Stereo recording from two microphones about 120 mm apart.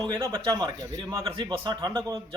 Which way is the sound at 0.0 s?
35° right (ahead or behind).